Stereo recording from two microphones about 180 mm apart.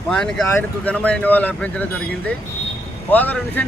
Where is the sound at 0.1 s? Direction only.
5° left (ahead or behind).